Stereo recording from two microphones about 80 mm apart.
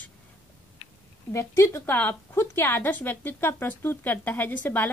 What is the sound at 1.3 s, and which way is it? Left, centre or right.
Speech, left.